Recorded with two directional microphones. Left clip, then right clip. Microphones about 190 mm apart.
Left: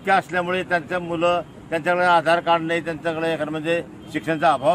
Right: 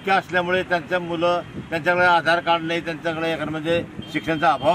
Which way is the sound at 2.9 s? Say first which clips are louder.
Left 1 dB; 10° left (ahead or behind).